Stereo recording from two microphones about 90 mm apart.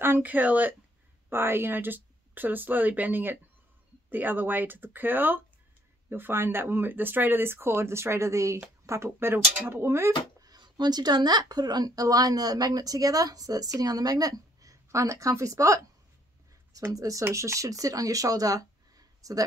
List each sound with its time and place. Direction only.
0.0 s speech: 20° right (ahead or behind)
10.4 s speech: 50° right (ahead or behind)
16.9 s speech: 40° right (ahead or behind)